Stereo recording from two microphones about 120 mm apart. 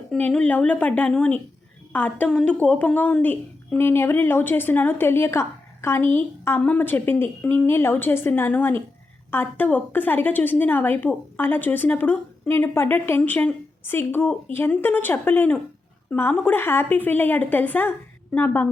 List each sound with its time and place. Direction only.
0.2 s a woman's voice: 10° left (ahead or behind)